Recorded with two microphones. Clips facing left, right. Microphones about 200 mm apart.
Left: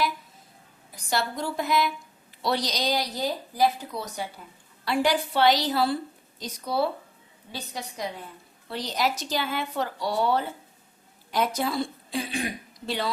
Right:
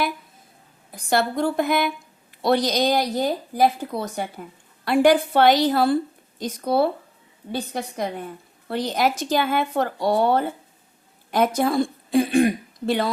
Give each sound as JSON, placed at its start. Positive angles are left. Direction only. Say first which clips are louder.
{"t": 0.9, "sound": "a woman's voice", "louder": "right 7 dB", "side_deg": -55}